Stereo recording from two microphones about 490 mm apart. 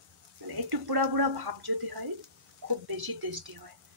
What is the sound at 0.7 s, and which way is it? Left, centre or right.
Speech, right.